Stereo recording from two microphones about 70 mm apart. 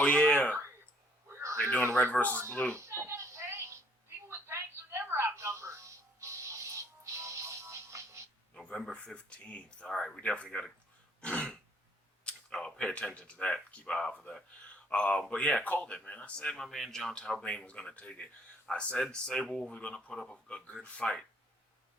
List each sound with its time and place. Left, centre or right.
0.0 s speech: centre
1.3 s a sound: right
2.0 s speech: left
2.3 s speech: right
2.7 s a sound: right
4.3 s music: right
8.6 s speech: centre
11.2 s throat clearing: centre
12.2 s a sound: centre
13.1 s speech: centre